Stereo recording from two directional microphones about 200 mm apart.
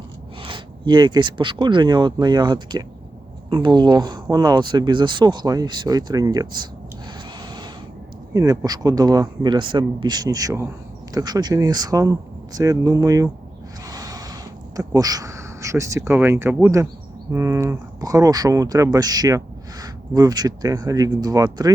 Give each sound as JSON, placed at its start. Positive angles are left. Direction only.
{"t": 0.4, "sound": "speech", "side_deg": -25}
{"t": 7.4, "sound": "a sound", "side_deg": -20}
{"t": 8.3, "sound": "speech", "side_deg": -15}
{"t": 13.8, "sound": "gasp", "side_deg": -20}
{"t": 14.8, "sound": "speech", "side_deg": -20}